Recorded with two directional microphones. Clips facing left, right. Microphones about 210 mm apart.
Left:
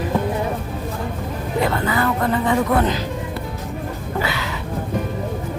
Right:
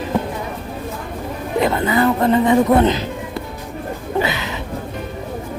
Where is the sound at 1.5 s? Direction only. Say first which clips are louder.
Right 4 dB; 20° right (ahead or behind).